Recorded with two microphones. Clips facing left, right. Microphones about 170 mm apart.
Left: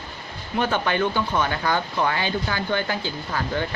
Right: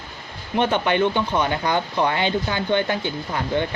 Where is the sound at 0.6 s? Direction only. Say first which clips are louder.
Right 3 dB; 20° right (ahead or behind).